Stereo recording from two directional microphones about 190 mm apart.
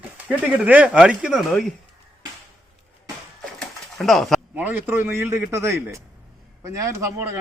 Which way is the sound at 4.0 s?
Centre (ahead or behind).